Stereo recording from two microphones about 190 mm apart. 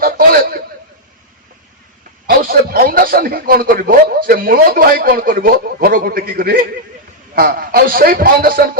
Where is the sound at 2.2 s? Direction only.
50° right (ahead or behind).